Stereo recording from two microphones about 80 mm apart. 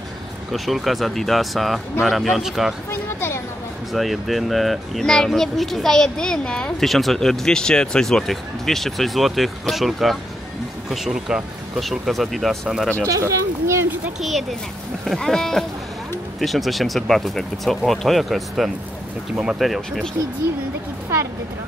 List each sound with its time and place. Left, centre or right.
0.5 s speech: centre
2.9 s speech: left
3.9 s speech: centre
11.8 s speech: centre
12.9 s a sound: right
14.2 s speech: centre